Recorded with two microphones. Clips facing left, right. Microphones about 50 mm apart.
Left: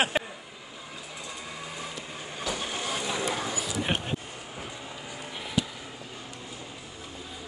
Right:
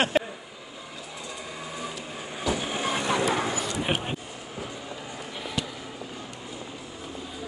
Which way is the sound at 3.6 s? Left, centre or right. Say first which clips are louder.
Right 2 dB; centre.